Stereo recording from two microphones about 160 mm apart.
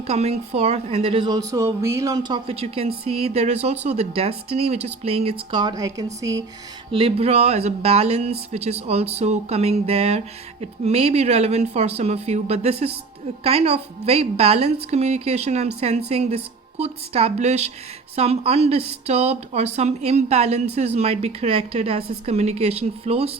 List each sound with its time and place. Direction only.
0.1 s speech: 40° right (ahead or behind); by 6.1 s 20° right (ahead or behind)
6.9 s speech: 35° right (ahead or behind)